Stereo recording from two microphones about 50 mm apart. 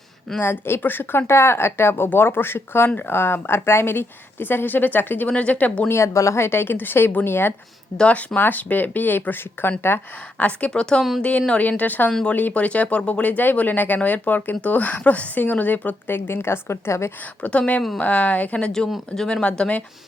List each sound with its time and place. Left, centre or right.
0.3 s speech: left
1.3 s speech: left
5.3 s a woman's voice: left
5.9 s speech: left
7.9 s a woman's voice: centre
8.4 s speech: left
10.3 s a woman's voice: left
10.7 s a woman's voice: centre; by 16.0 s left
16.0 s speech: left
17.4 s a woman's voice: left